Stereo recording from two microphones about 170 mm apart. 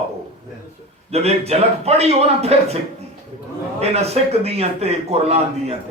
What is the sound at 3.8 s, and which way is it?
A man's voice, 40° right (ahead or behind).